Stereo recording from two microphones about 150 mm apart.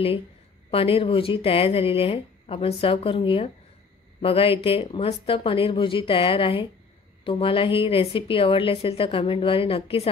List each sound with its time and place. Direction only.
0.7 s speech: 40° left (ahead or behind)